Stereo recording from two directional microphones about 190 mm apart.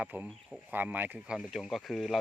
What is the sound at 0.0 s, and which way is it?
Speech, 10° right (ahead or behind).